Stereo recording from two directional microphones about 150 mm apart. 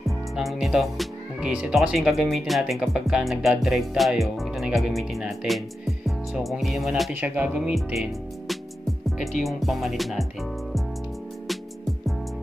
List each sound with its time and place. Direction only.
0.0 s speech: centre (ahead or behind)
2.3 s music: centre (ahead or behind)
7.2 s speech: 10° right (ahead or behind)
9.0 s music: centre (ahead or behind)